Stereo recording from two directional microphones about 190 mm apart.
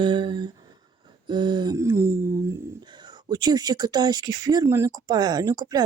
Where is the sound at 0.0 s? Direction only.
25° right (ahead or behind).